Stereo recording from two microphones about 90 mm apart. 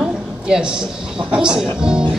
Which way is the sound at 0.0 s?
10° right (ahead or behind).